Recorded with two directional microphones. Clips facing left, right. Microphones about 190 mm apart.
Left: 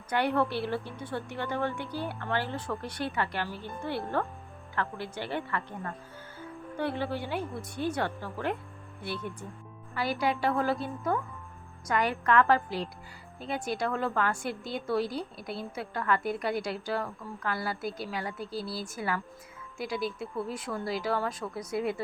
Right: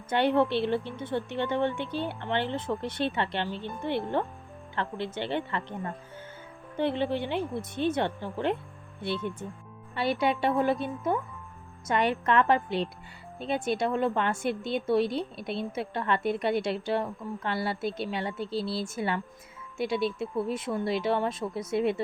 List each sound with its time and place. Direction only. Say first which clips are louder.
0.1 s a woman's voice: right 4 dB; 25° right (ahead or behind)